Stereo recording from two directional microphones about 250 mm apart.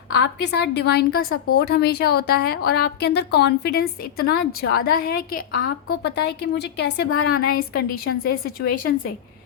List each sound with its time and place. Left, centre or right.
0.1 s a woman's voice: left
1.2 s a woman's voice: left
1.5 s a woman's voice: left